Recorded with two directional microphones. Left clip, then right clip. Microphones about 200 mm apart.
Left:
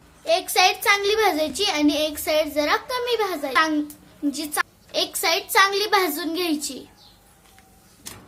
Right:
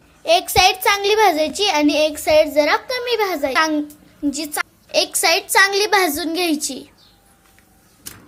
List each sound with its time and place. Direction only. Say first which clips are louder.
0.3 s a child's voice: right 5 dB; 25° right (ahead or behind)